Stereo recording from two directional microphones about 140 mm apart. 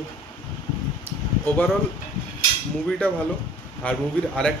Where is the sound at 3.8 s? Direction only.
5° left (ahead or behind).